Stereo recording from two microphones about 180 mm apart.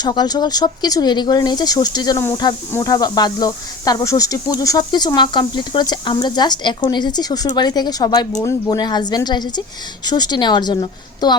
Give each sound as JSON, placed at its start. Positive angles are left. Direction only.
{"t": 0.0, "sound": "speech", "side_deg": 25}